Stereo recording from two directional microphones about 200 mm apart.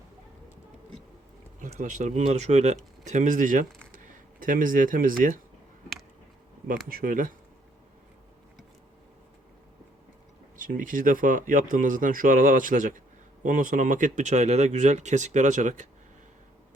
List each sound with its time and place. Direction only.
1.6 s speech: 40° right (ahead or behind)
6.8 s speech: 45° right (ahead or behind)
10.7 s speech: 40° right (ahead or behind)